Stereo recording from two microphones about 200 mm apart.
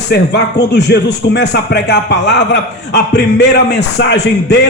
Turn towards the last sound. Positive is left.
turn(degrees=60)  # may be behind; listen again after turning